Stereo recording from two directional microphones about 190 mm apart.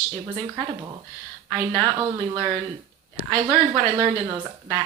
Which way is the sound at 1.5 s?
25° right (ahead or behind).